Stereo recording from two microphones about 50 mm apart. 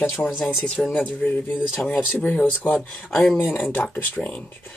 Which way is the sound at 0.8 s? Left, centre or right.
Left.